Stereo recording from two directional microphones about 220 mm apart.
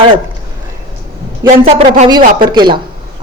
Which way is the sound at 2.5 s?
20° right (ahead or behind).